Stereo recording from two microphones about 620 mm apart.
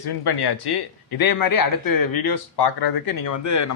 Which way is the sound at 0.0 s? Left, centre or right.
Left.